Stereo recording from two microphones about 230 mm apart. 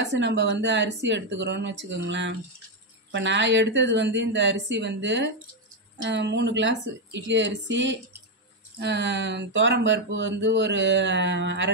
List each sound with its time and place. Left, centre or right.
0.0 s speech: right